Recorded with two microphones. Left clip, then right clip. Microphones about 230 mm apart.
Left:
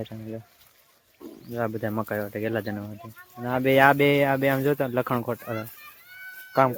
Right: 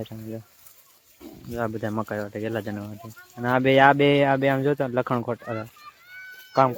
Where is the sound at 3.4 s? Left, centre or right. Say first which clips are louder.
Right 4 dB; centre.